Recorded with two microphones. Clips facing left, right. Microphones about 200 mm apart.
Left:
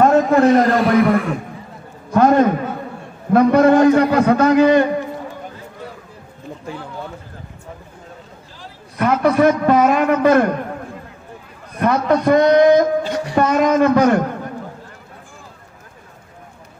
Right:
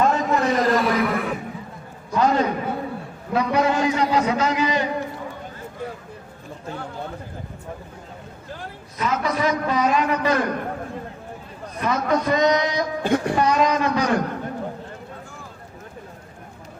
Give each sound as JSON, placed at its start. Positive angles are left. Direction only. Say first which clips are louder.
{"t": 0.0, "sound": "a sound", "louder": "left 8 dB", "side_deg": 50}
{"t": 0.7, "sound": "chuckle", "louder": "left 6 dB", "side_deg": 0}
{"t": 2.1, "sound": "a man's voice", "louder": "left 7 dB", "side_deg": 55}
{"t": 8.9, "sound": "a man's voice", "louder": "left 9 dB", "side_deg": 55}
{"t": 11.8, "sound": "a man's voice", "louder": "left 6 dB", "side_deg": 60}
{"t": 13.0, "sound": "speech", "louder": "right 2 dB", "side_deg": -55}
{"t": 13.3, "sound": "a woman's voice", "louder": "left 9 dB", "side_deg": 50}